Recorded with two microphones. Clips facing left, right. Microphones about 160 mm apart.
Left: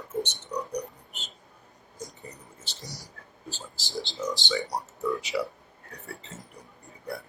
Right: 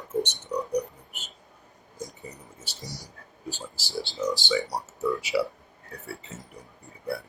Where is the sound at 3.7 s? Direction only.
20° left (ahead or behind).